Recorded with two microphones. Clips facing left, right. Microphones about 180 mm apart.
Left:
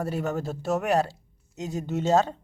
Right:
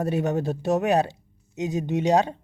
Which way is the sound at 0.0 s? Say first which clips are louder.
Right 4 dB; 20° right (ahead or behind).